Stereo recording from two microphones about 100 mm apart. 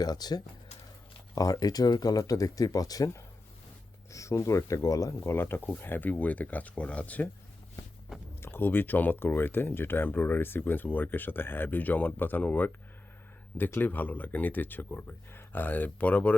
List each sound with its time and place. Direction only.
0.0 s speech: 40° left (ahead or behind); by 7.3 s 15° left (ahead or behind)
8.4 s speech: 20° left (ahead or behind)